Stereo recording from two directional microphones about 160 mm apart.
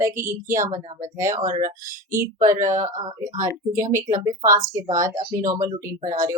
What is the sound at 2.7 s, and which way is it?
Speech, 50° right (ahead or behind).